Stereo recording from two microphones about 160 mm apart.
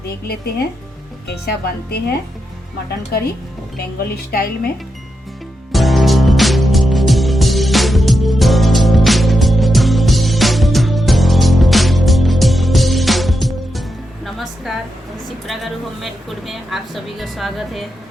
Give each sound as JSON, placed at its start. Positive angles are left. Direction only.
{"t": 1.3, "sound": "a woman's voice", "side_deg": 75}
{"t": 3.9, "sound": "a woman's voice", "side_deg": 70}
{"t": 5.7, "sound": "music", "side_deg": 0}
{"t": 14.3, "sound": "a sound", "side_deg": 0}
{"t": 15.4, "sound": "a woman's voice", "side_deg": 0}